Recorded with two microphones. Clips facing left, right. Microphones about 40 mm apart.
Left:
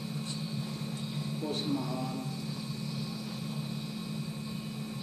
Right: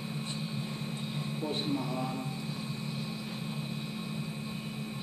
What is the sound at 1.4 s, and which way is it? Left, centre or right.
Speech, right.